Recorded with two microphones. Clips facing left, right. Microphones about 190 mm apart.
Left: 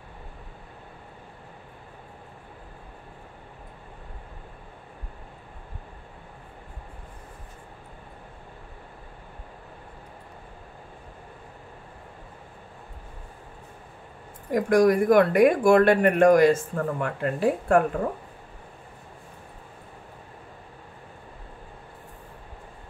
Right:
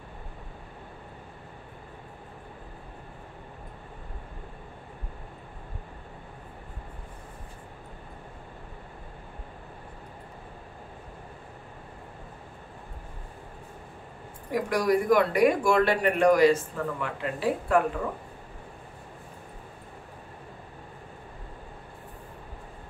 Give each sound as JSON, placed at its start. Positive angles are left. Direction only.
{"t": 14.5, "sound": "speech", "side_deg": 50}